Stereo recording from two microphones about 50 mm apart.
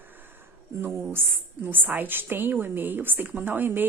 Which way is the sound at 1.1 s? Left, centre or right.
Right.